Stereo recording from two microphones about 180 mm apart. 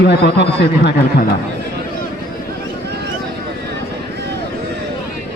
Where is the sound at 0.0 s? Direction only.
70° left (ahead or behind).